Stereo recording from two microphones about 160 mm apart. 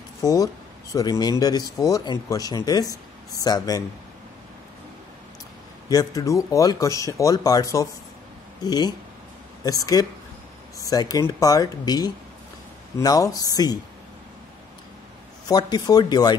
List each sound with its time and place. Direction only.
0.2 s speech: 20° left (ahead or behind)
5.9 s speech: 20° left (ahead or behind)
15.4 s speech: 25° left (ahead or behind)